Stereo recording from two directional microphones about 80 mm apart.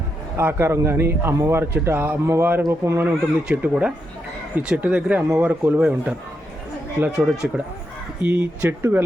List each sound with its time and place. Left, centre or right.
0.3 s a man's voice: right
3.5 s speech: centre
7.4 s speech: centre
8.2 s speech: right